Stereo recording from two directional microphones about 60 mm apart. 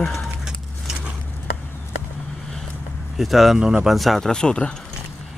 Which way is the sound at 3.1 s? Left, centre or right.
Centre.